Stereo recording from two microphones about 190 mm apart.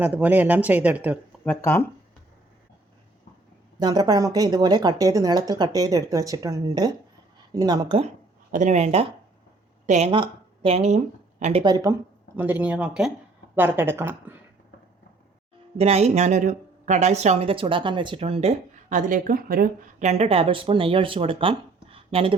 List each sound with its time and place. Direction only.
0.0 s speech: 10° right (ahead or behind)
1.5 s speech: 10° left (ahead or behind)
3.8 s speech: 20° right (ahead or behind)
8.5 s speech: 40° right (ahead or behind)
10.1 s speech: 25° right (ahead or behind)
11.6 s speech: 20° right (ahead or behind)
15.8 s speech: 35° right (ahead or behind)